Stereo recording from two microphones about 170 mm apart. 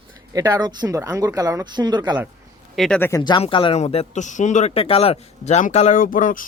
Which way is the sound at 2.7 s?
Centre (ahead or behind).